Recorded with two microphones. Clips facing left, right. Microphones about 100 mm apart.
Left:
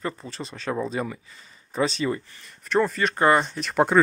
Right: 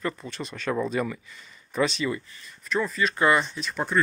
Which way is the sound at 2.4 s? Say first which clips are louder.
Left 6 dB; 65° left (ahead or behind).